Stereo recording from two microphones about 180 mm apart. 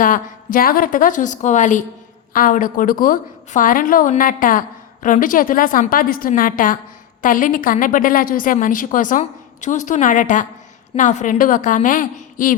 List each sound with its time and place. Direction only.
0.0 s a woman's voice: 50° left (ahead or behind)